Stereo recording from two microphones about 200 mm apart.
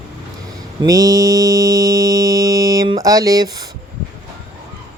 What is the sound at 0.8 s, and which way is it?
Mantra, 20° right (ahead or behind).